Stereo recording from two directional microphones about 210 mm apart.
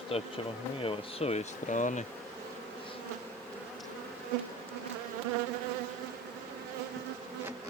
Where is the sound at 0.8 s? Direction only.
25° left (ahead or behind).